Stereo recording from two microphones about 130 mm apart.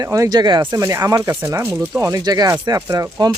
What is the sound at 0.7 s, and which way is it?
Speech, 20° right (ahead or behind).